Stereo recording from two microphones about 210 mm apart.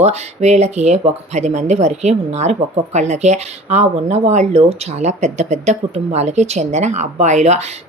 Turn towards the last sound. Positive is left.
turn(degrees=-30)  # may be behind; listen again after turning